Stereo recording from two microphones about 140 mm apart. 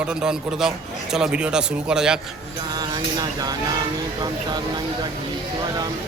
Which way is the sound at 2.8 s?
30° right (ahead or behind).